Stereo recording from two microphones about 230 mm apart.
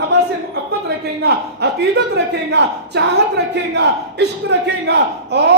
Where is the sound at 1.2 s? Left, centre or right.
Right.